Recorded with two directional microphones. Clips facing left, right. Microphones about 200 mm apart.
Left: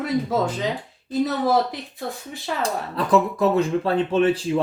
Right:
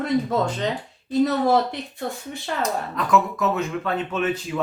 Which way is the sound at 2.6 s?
30° left (ahead or behind).